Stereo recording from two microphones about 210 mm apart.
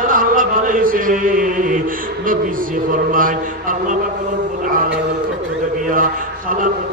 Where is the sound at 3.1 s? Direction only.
40° right (ahead or behind).